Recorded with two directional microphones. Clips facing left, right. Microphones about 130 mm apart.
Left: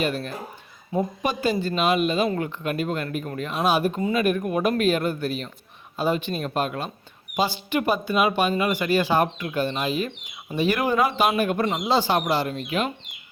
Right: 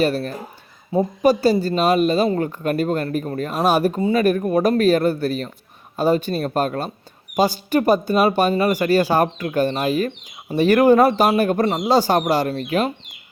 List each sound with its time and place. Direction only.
0.0 s a man's voice: 40° right (ahead or behind)